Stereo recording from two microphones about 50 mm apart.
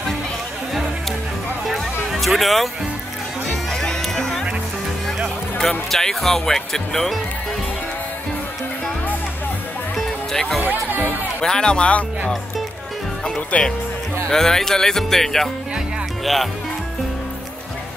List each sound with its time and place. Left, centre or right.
1.7 s music: centre
3.7 s music: centre
5.6 s speech: centre
9.9 s music: centre
10.6 s speech: right
11.4 s speech: centre
13.5 s speech: left
14.3 s speech: centre